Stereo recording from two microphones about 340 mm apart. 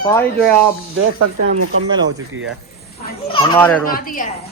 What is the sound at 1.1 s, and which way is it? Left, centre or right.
Speech, right.